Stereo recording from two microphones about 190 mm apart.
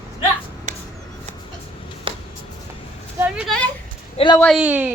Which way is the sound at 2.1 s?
30° right (ahead or behind).